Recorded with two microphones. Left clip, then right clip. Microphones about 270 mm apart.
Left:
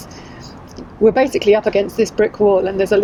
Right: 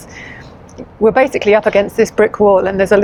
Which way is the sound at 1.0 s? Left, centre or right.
Centre.